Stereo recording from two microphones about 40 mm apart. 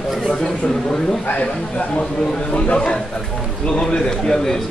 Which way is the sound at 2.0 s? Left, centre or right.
Left.